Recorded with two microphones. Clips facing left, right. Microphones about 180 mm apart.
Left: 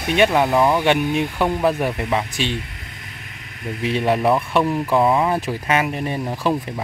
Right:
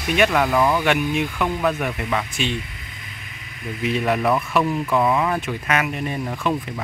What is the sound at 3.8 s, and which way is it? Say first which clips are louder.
Speech: left 2 dB; 30° left (ahead or behind).